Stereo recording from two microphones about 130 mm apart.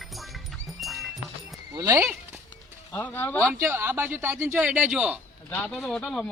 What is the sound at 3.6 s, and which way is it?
Speech, 20° right (ahead or behind).